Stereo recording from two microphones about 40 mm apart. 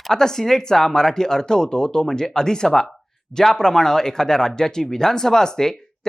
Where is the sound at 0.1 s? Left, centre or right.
Centre.